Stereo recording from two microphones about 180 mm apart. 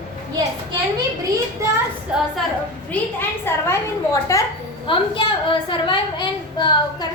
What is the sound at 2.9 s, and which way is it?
A woman's voice, 10° left (ahead or behind).